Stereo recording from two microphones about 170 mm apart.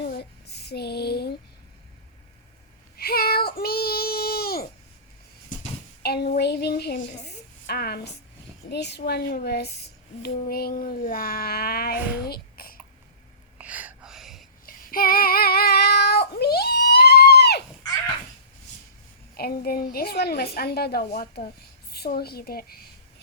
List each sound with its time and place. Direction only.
0.0 s a sound: 70° left (ahead or behind)
3.0 s child singing: 65° left (ahead or behind)
6.0 s a child's voice: 70° left (ahead or behind)
8.7 s speech: 80° left; by 12.7 s 60° left (ahead or behind)
13.6 s a sound: 10° right (ahead or behind)
14.7 s child singing: 55° left (ahead or behind); by 17.6 s 70° left (ahead or behind)
19.3 s speech: 65° left (ahead or behind)